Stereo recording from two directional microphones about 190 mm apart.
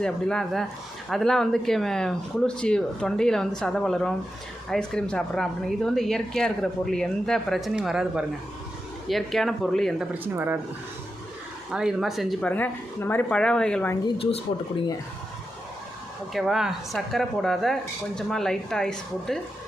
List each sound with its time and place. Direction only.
0.0 s speech: 5° left (ahead or behind)
10.3 s speech: 10° right (ahead or behind)
11.7 s speech: 5° right (ahead or behind)
14.2 s speech: 30° left (ahead or behind)
16.3 s speech: centre (ahead or behind)